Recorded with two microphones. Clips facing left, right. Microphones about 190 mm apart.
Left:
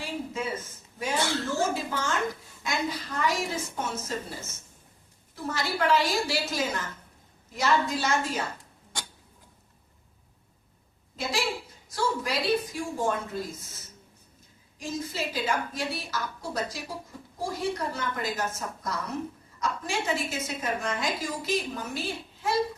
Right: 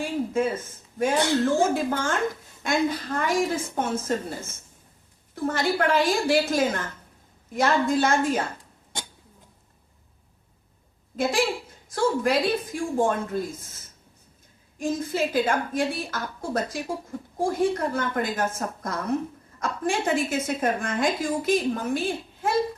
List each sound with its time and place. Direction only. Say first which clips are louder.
0.0 s a sound: right 8 dB; 50° right (ahead or behind)
1.7 s a woman's voice: right 5 dB; 55° right (ahead or behind)
11.2 s a woman's voice: right 6 dB; 50° right (ahead or behind)
14.8 s a woman's voice: right 7 dB; 50° right (ahead or behind)